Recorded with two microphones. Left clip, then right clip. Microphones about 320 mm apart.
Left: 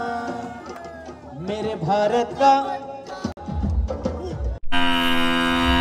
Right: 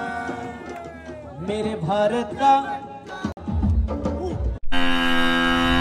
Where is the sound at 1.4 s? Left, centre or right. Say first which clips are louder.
Left 1 dB; centre.